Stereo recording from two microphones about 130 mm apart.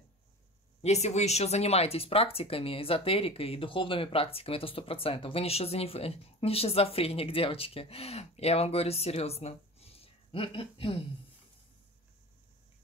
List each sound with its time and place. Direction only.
0.8 s speech: 60° left (ahead or behind); by 11.1 s 45° left (ahead or behind)